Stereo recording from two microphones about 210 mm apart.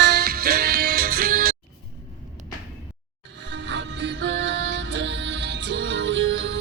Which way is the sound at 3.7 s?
60° right (ahead or behind).